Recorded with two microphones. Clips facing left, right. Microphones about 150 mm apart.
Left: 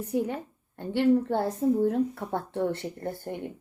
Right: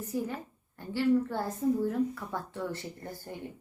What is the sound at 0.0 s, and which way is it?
A woman's voice, 65° left (ahead or behind).